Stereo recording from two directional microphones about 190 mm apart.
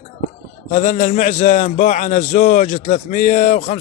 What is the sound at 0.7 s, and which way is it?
A man's voice, 40° left (ahead or behind).